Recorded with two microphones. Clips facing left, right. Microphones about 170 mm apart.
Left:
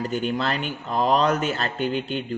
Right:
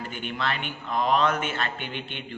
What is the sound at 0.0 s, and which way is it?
Speech, 40° left (ahead or behind).